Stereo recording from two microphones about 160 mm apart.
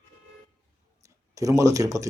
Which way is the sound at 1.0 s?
20° right (ahead or behind).